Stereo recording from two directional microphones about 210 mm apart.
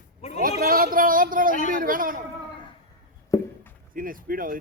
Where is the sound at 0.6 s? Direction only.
45° right (ahead or behind).